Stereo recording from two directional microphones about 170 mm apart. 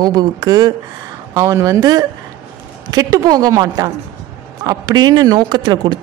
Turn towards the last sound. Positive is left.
turn(degrees=-25)  # may be behind; listen again after turning